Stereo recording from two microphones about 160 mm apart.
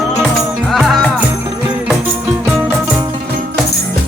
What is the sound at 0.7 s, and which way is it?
Music, centre (ahead or behind).